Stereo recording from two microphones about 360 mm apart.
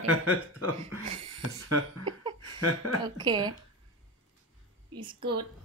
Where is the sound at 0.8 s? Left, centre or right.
Centre.